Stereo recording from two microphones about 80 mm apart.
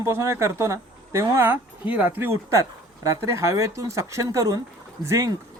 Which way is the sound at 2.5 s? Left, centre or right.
Right.